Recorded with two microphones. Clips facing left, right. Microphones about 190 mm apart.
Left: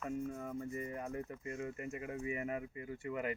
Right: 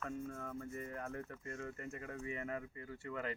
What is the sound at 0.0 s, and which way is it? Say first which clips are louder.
Speech: left 4 dB; 10° left (ahead or behind).